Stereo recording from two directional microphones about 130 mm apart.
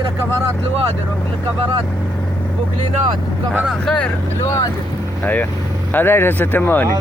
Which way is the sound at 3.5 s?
10° right (ahead or behind).